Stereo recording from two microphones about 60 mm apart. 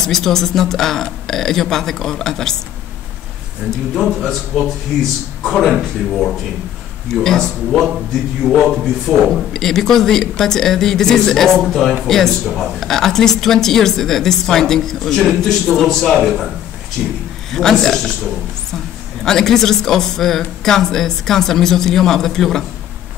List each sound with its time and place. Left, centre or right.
0.0 s a woman's voice: centre
3.7 s a woman's voice: centre
17.0 s speech: centre
17.5 s speech: centre
19.2 s speech: centre